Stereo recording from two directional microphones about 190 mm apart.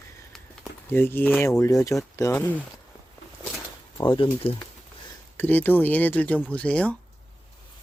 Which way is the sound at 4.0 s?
25° left (ahead or behind).